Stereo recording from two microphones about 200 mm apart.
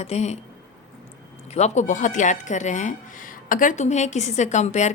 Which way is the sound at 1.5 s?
35° left (ahead or behind).